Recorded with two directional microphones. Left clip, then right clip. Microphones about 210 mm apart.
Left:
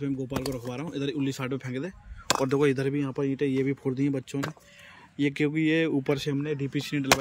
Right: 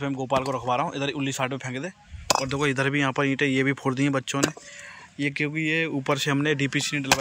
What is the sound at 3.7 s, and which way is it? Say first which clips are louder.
Speech: right 4 dB; 45° right (ahead or behind).